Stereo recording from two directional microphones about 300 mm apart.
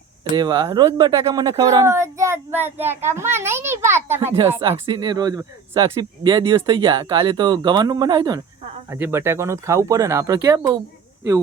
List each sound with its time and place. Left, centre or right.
0.3 s speech: centre